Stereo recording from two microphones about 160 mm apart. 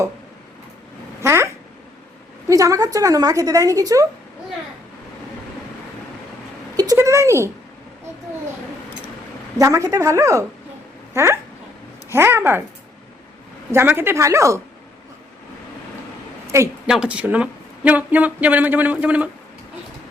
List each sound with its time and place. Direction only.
1.2 s speech: 15° right (ahead or behind)
2.5 s a woman's voice: 20° right (ahead or behind)
6.7 s speech: 20° right (ahead or behind)
9.6 s a woman's voice: 20° right (ahead or behind)
13.7 s speech: 15° right (ahead or behind)
16.8 s speech: 5° right (ahead or behind)